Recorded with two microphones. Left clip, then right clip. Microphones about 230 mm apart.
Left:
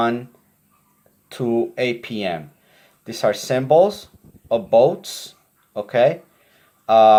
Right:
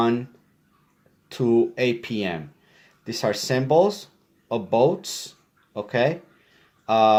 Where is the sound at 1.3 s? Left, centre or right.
Right.